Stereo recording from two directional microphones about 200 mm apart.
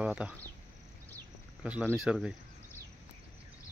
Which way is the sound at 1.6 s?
5° right (ahead or behind).